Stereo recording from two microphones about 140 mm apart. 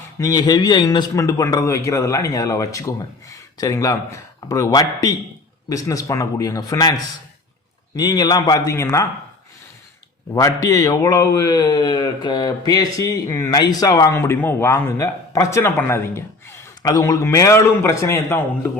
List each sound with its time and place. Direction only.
0.2 s a man's voice: 25° left (ahead or behind)
10.3 s a man's voice: 25° left (ahead or behind)